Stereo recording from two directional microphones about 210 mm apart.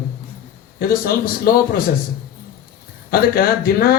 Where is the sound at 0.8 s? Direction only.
45° left (ahead or behind).